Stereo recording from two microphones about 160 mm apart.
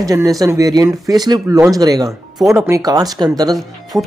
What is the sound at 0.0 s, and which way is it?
Speech, 20° right (ahead or behind).